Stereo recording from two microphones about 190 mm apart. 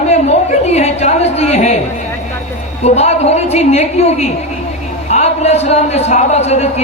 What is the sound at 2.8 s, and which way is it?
A man's voice, 35° left (ahead or behind).